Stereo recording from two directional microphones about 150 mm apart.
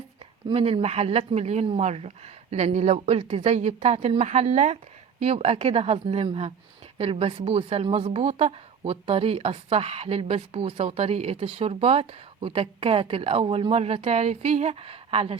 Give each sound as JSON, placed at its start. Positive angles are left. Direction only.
{"t": 0.5, "sound": "a woman's voice", "side_deg": -40}